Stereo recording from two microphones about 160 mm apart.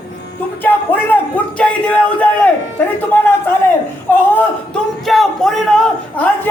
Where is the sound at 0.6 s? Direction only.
10° left (ahead or behind).